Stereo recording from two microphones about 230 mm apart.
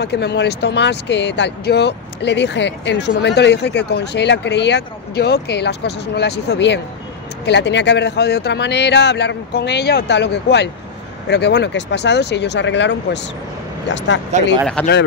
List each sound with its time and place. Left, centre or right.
0.0 s speech: left
14.8 s speech: centre